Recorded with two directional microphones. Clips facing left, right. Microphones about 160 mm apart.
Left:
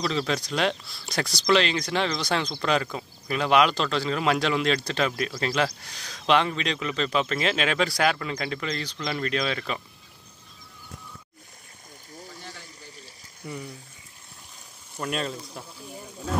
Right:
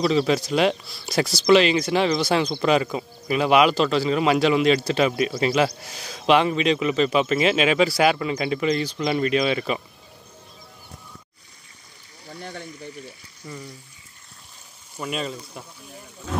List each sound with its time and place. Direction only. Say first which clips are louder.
0.0 s speech: right 7 dB; 5° right (ahead or behind)
12.4 s a sound: right 8 dB; 75° right (ahead or behind)
15.0 s speech: right 1 dB; centre (ahead or behind)